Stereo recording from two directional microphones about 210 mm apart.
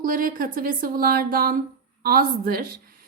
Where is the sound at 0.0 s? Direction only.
40° right (ahead or behind).